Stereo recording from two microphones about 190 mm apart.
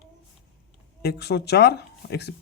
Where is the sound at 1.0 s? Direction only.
60° left (ahead or behind).